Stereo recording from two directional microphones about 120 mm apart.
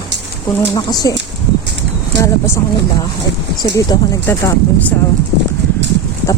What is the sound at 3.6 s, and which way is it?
Speech, 30° left (ahead or behind).